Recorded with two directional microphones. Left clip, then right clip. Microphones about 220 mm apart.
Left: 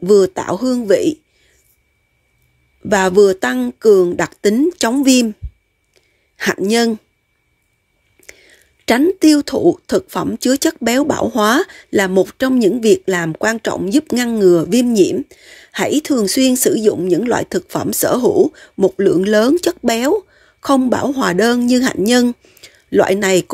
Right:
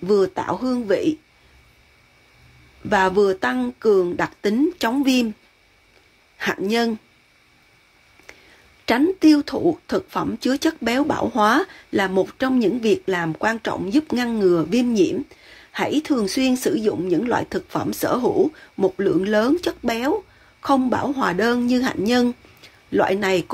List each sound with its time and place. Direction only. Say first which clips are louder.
0.0 s speech: left 7 dB; 45° left (ahead or behind)
2.9 s speech: left 6 dB; 45° left (ahead or behind)
6.3 s speech: left 6 dB; 45° left (ahead or behind)
8.8 s speech: left 4 dB; 40° left (ahead or behind)